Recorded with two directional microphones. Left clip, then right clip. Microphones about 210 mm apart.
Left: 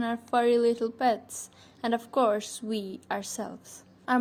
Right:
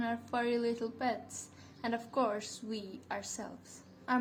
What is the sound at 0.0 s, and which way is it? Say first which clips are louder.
A woman's voice: left 9 dB; 30° left (ahead or behind).